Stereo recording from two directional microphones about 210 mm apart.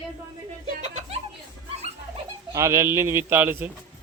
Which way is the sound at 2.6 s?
15° right (ahead or behind).